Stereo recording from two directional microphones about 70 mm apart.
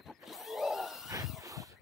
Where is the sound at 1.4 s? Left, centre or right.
Right.